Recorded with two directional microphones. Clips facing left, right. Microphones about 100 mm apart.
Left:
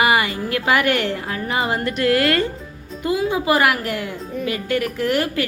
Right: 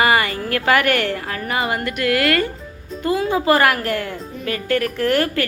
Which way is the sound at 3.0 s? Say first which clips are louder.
Right 2 dB; 10° left (ahead or behind).